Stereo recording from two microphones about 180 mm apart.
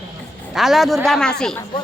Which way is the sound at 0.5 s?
Centre (ahead or behind).